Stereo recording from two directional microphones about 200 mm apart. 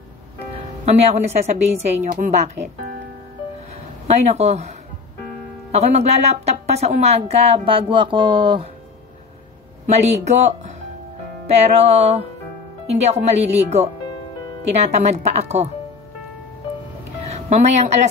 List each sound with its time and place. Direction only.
0.8 s speech: 30° right (ahead or behind)
4.3 s speech: 35° right (ahead or behind)
9.8 s speech: 35° right (ahead or behind)
17.3 s speech: 35° right (ahead or behind)